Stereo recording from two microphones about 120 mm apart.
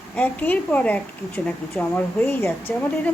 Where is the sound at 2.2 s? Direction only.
20° left (ahead or behind).